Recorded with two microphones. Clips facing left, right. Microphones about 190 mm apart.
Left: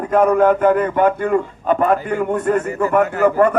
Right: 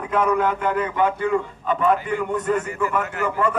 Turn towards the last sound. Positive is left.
turn(degrees=40)  # may be behind; listen again after turning